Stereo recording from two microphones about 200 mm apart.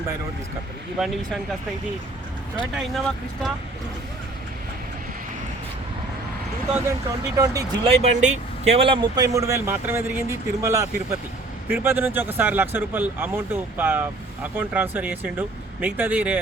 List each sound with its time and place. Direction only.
0.9 s speech: centre (ahead or behind)
2.7 s speech: centre (ahead or behind)
7.3 s speech: 15° right (ahead or behind)
8.0 s speech: 35° right (ahead or behind); by 16.4 s 5° right (ahead or behind)